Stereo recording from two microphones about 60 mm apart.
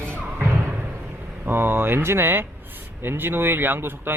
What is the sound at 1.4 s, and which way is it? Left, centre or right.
Speech, right.